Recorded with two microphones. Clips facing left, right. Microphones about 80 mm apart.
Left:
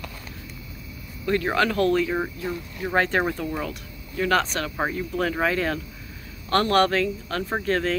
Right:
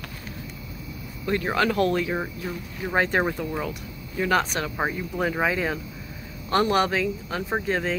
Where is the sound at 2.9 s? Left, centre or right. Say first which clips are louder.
Even; centre.